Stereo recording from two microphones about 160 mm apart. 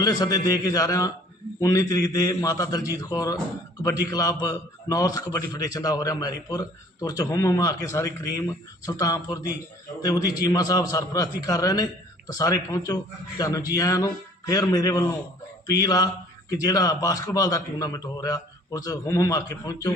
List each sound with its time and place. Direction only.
0.0 s a man's voice: 25° left (ahead or behind)